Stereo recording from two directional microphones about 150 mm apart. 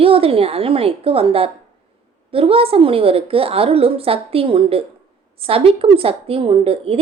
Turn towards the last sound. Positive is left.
turn(degrees=-40)  # may be behind; listen again after turning